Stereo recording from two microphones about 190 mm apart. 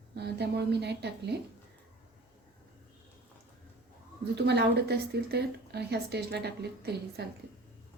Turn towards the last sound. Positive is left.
turn(degrees=-60)  # may be behind; listen again after turning